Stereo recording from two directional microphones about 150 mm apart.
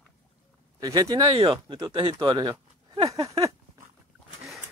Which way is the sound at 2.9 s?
25° right (ahead or behind).